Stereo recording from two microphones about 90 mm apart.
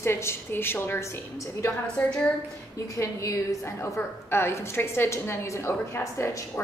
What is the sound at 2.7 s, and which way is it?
A woman's voice, 40° left (ahead or behind).